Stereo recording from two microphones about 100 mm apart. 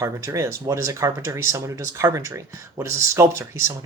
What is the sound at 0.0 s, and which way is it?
Speech, 30° right (ahead or behind).